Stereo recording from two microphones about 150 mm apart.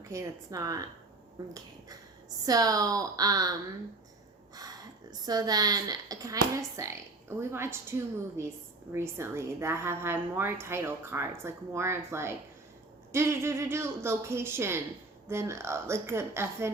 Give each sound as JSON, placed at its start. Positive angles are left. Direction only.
{"t": 0.0, "sound": "speech", "side_deg": -20}
{"t": 2.5, "sound": "speech", "side_deg": -25}
{"t": 4.5, "sound": "a woman's voice", "side_deg": -25}